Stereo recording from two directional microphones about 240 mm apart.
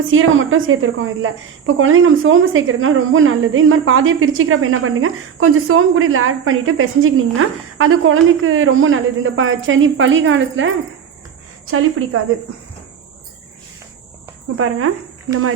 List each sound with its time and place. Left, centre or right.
0.1 s a woman's voice: right
14.5 s speech: right